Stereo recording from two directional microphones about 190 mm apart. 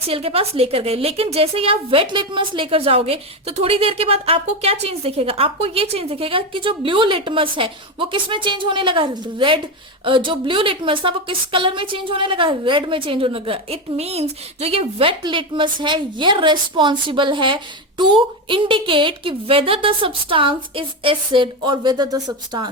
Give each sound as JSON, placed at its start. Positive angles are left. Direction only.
{"t": 0.1, "sound": "a woman's voice", "side_deg": -30}